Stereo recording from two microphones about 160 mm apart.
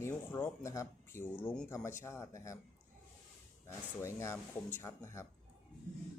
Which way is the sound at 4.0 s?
15° left (ahead or behind).